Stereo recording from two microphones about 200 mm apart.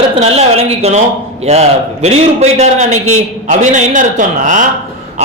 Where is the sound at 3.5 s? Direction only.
35° right (ahead or behind).